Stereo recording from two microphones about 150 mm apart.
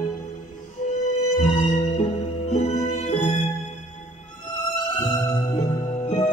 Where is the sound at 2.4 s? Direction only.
45° left (ahead or behind).